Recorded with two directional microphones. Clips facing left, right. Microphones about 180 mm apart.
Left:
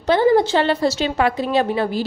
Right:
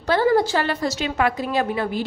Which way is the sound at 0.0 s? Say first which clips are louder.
Left 3 dB; 20° left (ahead or behind).